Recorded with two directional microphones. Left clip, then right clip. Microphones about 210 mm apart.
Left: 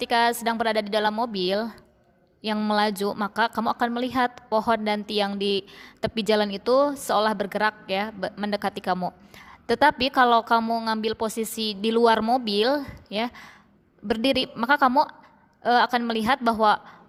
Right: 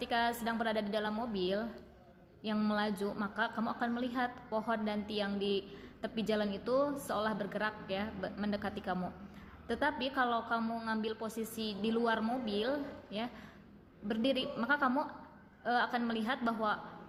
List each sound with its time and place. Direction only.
0.0 s a woman's voice: 40° left (ahead or behind)